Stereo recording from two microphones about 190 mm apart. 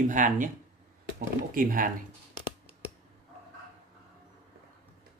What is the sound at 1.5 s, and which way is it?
Speech, 45° right (ahead or behind).